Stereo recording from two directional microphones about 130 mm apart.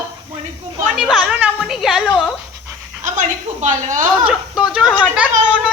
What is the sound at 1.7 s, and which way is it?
Speech, centre (ahead or behind).